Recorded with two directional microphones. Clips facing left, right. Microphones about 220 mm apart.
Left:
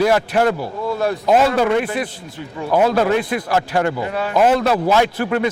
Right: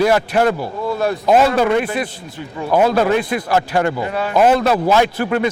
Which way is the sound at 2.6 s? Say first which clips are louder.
Right 1 dB; 30° right (ahead or behind).